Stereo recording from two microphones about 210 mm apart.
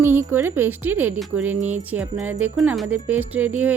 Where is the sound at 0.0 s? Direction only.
10° right (ahead or behind).